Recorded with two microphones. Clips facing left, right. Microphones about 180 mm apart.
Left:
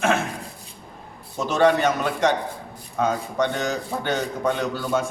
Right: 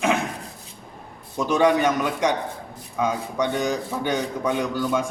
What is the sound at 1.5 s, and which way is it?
A man's voice, 10° right (ahead or behind).